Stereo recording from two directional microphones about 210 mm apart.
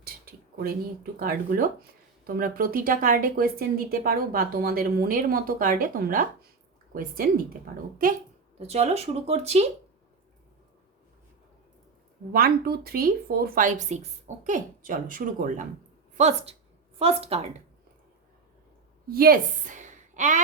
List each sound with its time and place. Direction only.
0.0 s speech: 45° right (ahead or behind)
8.5 s speech: 30° right (ahead or behind)
12.3 s speech: 45° right (ahead or behind); by 17.4 s 30° right (ahead or behind)
19.0 s a woman's voice: 45° right (ahead or behind)